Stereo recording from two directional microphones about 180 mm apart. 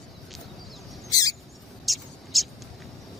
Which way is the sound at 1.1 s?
20° left (ahead or behind).